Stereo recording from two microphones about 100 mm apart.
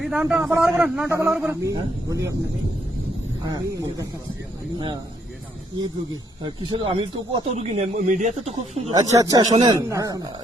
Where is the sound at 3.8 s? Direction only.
35° right (ahead or behind).